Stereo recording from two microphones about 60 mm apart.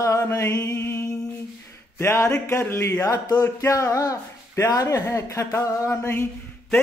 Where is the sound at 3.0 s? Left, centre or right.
Left.